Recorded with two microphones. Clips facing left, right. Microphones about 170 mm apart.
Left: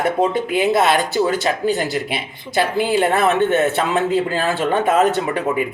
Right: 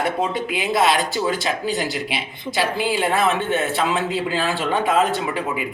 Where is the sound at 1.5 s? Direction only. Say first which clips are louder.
Left 4 dB; 50° left (ahead or behind).